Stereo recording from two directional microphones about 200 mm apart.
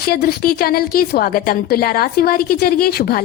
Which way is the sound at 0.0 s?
50° left (ahead or behind).